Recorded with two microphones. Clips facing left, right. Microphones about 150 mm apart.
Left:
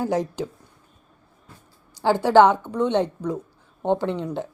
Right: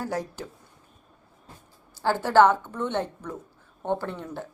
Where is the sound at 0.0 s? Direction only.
20° left (ahead or behind).